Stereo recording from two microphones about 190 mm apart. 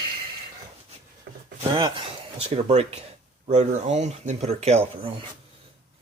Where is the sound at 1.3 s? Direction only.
60° right (ahead or behind).